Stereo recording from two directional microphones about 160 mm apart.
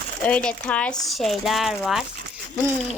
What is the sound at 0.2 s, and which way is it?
A child's voice, 10° left (ahead or behind).